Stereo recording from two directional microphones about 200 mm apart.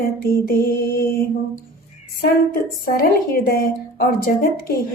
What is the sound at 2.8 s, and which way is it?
Female singing, 45° left (ahead or behind).